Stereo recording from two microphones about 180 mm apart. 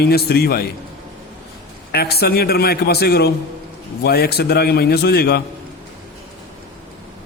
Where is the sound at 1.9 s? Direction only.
60° left (ahead or behind).